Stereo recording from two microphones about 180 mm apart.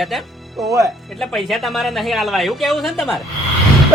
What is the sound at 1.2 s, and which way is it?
Speech, centre (ahead or behind).